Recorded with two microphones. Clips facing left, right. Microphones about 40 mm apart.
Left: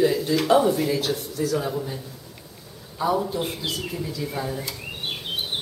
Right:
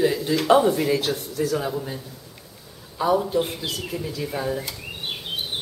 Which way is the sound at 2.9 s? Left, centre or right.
Centre.